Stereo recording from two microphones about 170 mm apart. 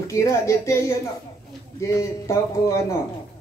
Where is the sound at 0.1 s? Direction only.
15° left (ahead or behind).